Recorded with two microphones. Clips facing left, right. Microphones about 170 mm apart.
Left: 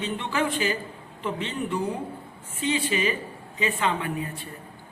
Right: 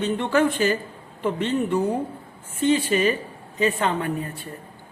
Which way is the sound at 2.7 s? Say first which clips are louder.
Right 6 dB; 45° right (ahead or behind).